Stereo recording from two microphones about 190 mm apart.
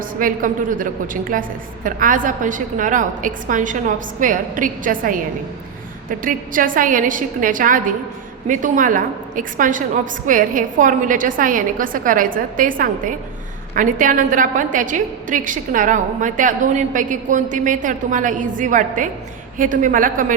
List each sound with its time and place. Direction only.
0.0 s a woman's voice: 45° right (ahead or behind)